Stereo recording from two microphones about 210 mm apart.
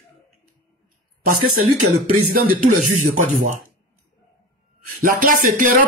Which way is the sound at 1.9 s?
35° right (ahead or behind).